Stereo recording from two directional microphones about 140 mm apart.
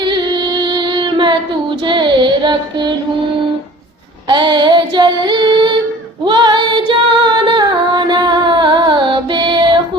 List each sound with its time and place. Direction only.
0.0 s female singing: 35° right (ahead or behind)
1.9 s child singing: 35° right (ahead or behind)
4.3 s female singing: 35° right (ahead or behind)